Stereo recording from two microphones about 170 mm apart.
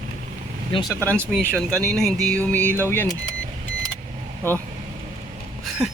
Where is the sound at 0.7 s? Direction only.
25° left (ahead or behind).